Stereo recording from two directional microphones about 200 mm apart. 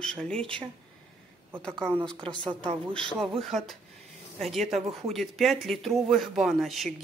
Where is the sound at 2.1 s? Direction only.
5° left (ahead or behind).